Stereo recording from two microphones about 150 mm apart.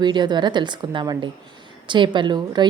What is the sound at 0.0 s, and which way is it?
A woman's voice, 30° right (ahead or behind).